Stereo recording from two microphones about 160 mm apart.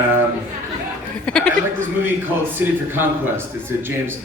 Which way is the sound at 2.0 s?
10° right (ahead or behind).